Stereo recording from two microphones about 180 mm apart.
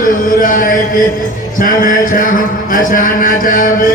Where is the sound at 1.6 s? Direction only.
50° left (ahead or behind).